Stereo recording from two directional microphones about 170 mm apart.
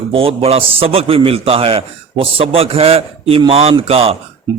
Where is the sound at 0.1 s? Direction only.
35° right (ahead or behind).